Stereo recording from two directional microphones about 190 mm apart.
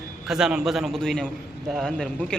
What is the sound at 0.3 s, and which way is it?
A man's voice, 5° right (ahead or behind).